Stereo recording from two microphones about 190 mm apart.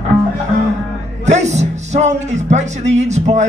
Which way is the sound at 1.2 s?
35° right (ahead or behind).